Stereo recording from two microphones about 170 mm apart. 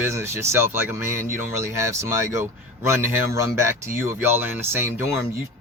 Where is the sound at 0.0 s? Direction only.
15° right (ahead or behind).